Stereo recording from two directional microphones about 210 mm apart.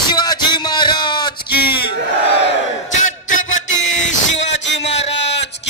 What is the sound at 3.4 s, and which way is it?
Music, 65° left (ahead or behind).